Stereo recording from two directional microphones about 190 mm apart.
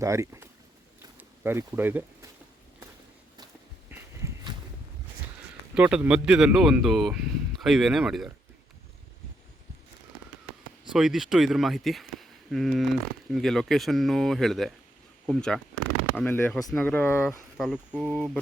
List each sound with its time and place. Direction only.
0.0 s speech: 15° right (ahead or behind)
1.5 s speech: 10° right (ahead or behind)
3.8 s a sound: 10° right (ahead or behind)
5.7 s speech: 5° right (ahead or behind)
10.9 s speech: centre (ahead or behind)
17.2 s speech: 5° right (ahead or behind)